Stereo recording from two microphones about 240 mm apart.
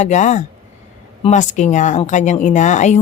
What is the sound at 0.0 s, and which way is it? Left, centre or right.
A woman's voice, left.